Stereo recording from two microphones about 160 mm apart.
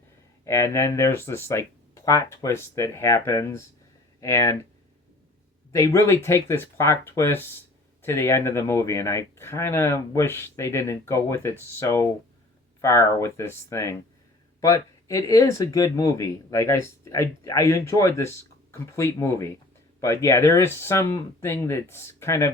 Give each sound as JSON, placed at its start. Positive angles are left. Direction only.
{"t": 0.4, "sound": "speech", "side_deg": 20}
{"t": 5.7, "sound": "speech", "side_deg": 20}